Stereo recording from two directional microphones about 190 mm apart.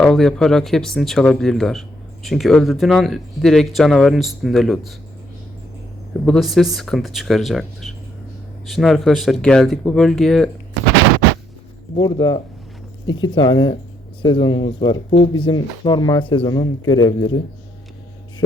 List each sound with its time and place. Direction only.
0.0 s speech: centre (ahead or behind)
6.2 s speech: centre (ahead or behind)
11.9 s speech: 20° left (ahead or behind)